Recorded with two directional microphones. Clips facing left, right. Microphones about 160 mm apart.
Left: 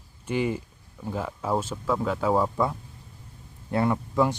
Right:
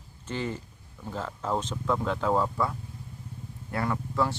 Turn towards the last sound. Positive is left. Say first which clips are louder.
# left 4 dB
turn(degrees=15)  # may be behind; listen again after turning